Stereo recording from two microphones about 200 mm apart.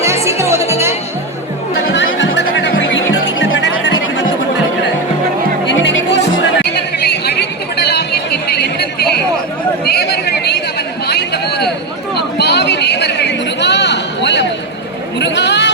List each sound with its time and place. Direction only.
0.0 s music: 15° right (ahead or behind)
1.9 s music: 60° left (ahead or behind)
5.6 s music: 60° left (ahead or behind)
6.7 s chatter: 55° left (ahead or behind)
9.8 s a sound: 50° left (ahead or behind)